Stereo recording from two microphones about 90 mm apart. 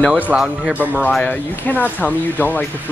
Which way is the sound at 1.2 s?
20° left (ahead or behind).